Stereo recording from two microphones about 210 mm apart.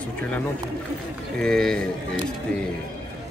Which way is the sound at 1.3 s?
5° left (ahead or behind).